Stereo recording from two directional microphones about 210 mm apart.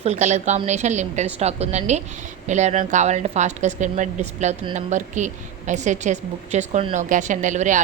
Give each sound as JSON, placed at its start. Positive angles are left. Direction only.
{"t": 0.0, "sound": "a woman's voice", "side_deg": -30}